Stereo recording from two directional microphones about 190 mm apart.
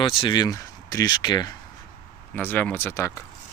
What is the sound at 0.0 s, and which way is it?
Speech, 25° left (ahead or behind).